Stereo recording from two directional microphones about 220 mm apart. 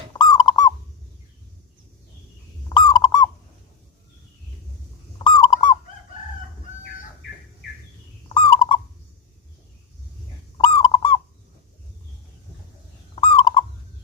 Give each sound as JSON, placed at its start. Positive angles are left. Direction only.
{"t": 0.2, "sound": "fowl", "side_deg": 20}
{"t": 2.6, "sound": "goose", "side_deg": 20}
{"t": 5.2, "sound": "fowl", "side_deg": 20}
{"t": 8.3, "sound": "owl", "side_deg": 20}
{"t": 10.6, "sound": "fowl", "side_deg": 25}
{"t": 13.2, "sound": "fowl", "side_deg": 20}